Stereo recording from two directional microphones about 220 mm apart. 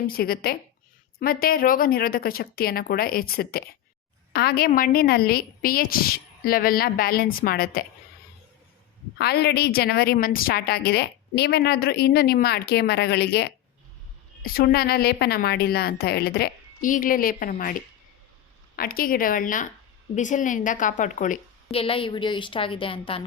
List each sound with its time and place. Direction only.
0.1 s a woman's voice: 45° left (ahead or behind)
9.1 s a woman's voice: 45° left (ahead or behind); by 23.2 s 25° left (ahead or behind)